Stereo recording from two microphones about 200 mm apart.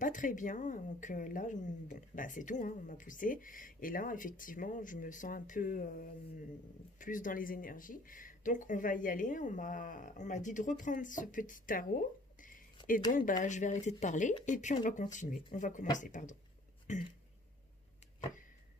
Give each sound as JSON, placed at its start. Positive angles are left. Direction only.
{"t": 0.0, "sound": "speech", "side_deg": 40}